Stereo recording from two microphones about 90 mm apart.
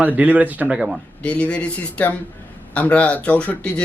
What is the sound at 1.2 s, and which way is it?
Speech, 15° left (ahead or behind).